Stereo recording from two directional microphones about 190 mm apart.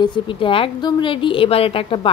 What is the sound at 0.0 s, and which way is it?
Speech, 25° left (ahead or behind).